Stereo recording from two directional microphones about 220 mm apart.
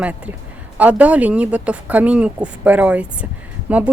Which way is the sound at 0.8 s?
5° right (ahead or behind).